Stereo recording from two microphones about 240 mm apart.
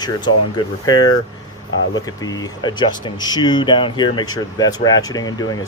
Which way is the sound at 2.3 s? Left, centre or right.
Centre.